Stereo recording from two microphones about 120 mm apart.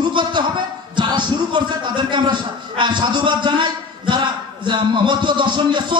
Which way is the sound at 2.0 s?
40° right (ahead or behind).